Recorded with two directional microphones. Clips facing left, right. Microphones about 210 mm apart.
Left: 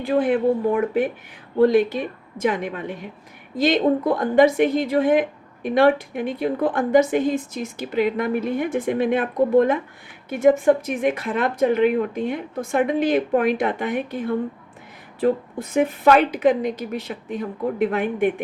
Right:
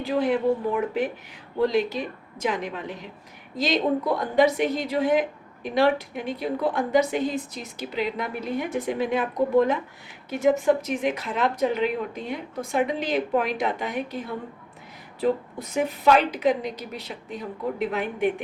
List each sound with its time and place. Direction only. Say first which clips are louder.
0.0 s a woman's voice: left 4 dB; 50° left (ahead or behind)
15.7 s a woman's voice: left 4 dB; 55° left (ahead or behind)